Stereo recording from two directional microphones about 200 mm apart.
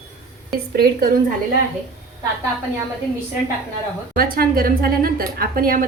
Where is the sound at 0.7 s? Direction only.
50° right (ahead or behind).